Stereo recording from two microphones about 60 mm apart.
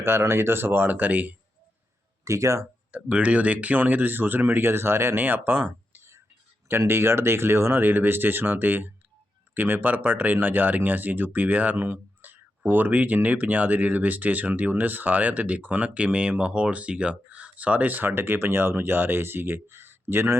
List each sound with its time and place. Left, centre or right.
0.0 s speech: right
2.2 s speech: right
2.9 s speech: right
6.7 s speech: right